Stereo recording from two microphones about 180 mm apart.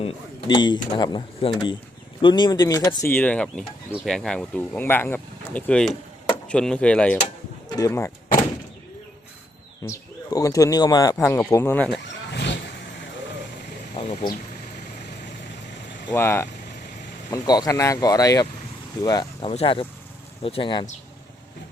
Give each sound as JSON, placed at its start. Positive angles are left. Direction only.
{"t": 0.0, "sound": "speech", "side_deg": 30}
{"t": 7.8, "sound": "speech", "side_deg": 15}
{"t": 9.8, "sound": "speech", "side_deg": 20}
{"t": 12.3, "sound": "vehicle", "side_deg": 65}
{"t": 13.9, "sound": "a sound", "side_deg": 35}
{"t": 16.1, "sound": "speech", "side_deg": 15}
{"t": 19.5, "sound": "speech", "side_deg": 30}